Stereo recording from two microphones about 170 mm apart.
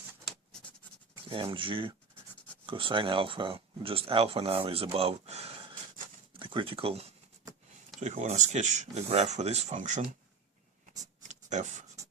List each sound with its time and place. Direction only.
1.3 s speech: 30° right (ahead or behind)
7.9 s speech: 45° right (ahead or behind)
11.2 s a sound: 45° right (ahead or behind)